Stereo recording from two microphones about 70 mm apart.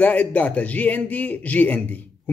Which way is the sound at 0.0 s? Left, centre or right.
Left.